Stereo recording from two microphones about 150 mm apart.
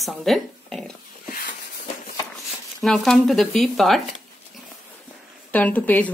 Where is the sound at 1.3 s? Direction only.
90° left.